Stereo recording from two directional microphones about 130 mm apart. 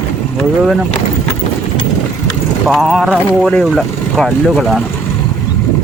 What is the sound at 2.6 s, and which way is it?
Speech, centre (ahead or behind).